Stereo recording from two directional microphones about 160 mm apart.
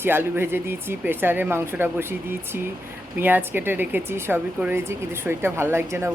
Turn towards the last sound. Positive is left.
turn(degrees=-15)  # may be behind; listen again after turning